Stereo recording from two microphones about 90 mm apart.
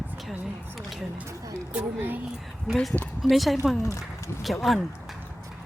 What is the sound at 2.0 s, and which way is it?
Speech, 20° right (ahead or behind).